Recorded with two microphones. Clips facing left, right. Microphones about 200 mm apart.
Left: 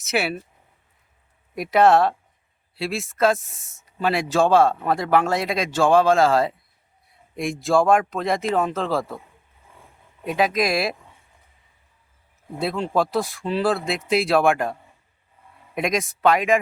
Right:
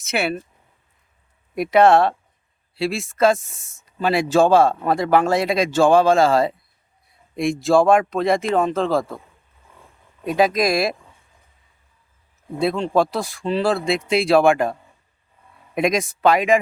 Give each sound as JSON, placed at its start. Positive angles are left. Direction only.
{"t": 0.0, "sound": "speech", "side_deg": 0}
{"t": 1.5, "sound": "speech", "side_deg": 0}
{"t": 7.6, "sound": "speech", "side_deg": 0}
{"t": 10.2, "sound": "speech", "side_deg": -40}
{"t": 10.7, "sound": "speech", "side_deg": 5}
{"t": 12.5, "sound": "speech", "side_deg": 5}
{"t": 15.7, "sound": "speech", "side_deg": 0}